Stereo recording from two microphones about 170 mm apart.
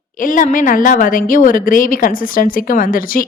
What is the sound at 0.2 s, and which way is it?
A woman's voice, 50° left (ahead or behind).